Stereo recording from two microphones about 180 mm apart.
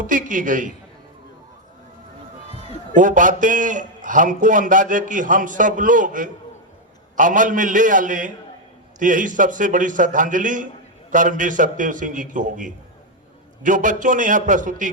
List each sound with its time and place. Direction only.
0.1 s a man's voice: 45° right (ahead or behind)
2.9 s a man's voice: 45° right (ahead or behind)